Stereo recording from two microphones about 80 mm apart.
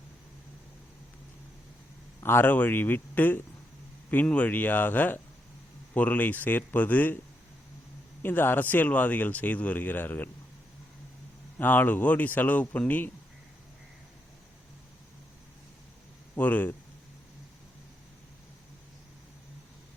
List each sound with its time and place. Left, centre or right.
2.2 s speech: left
8.2 s speech: left
11.5 s speech: left
16.3 s speech: left